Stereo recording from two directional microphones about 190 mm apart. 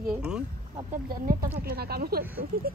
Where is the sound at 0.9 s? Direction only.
50° right (ahead or behind).